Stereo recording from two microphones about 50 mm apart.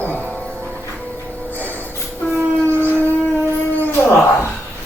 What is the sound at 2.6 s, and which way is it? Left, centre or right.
Civil defense siren, left.